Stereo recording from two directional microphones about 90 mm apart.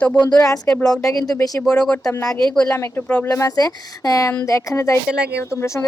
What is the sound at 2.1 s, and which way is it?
Speech, 30° left (ahead or behind).